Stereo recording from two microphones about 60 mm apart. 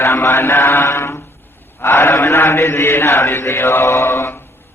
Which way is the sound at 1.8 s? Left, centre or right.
Left.